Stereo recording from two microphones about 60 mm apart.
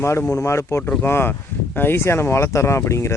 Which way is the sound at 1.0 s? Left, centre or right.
Left.